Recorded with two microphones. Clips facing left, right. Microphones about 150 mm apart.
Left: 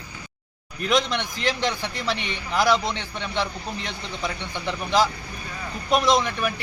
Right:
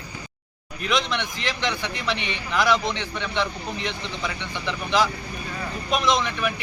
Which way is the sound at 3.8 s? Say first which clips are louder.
Right 1 dB; 40° left (ahead or behind).